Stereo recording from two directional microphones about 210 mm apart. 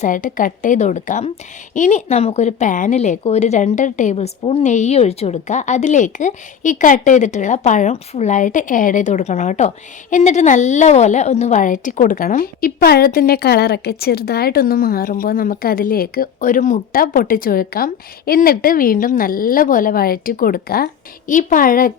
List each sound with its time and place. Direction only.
0.0 s a woman's voice: 40° left (ahead or behind)